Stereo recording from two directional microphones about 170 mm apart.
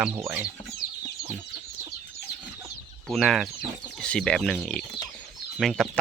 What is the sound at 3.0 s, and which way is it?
Speech, centre (ahead or behind).